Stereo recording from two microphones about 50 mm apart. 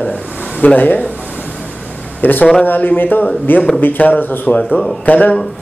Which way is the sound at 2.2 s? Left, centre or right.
Left.